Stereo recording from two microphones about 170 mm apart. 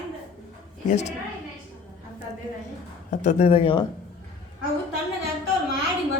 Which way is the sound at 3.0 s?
40° left (ahead or behind).